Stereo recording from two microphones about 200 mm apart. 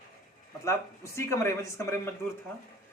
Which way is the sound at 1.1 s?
15° left (ahead or behind).